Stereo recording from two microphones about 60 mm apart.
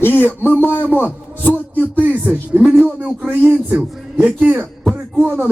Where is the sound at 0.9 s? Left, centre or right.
Left.